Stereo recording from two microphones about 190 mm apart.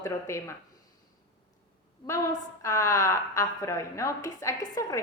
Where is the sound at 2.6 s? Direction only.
15° left (ahead or behind).